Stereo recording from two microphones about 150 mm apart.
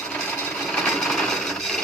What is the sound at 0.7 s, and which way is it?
Sewing machine, centre (ahead or behind).